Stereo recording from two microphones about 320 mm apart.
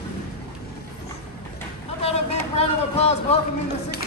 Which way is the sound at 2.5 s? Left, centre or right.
Centre.